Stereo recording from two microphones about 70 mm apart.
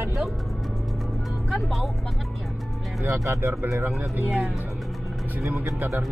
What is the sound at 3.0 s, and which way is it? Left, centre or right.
Speech, right.